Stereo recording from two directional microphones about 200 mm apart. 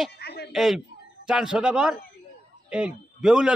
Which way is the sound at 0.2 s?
55° left (ahead or behind).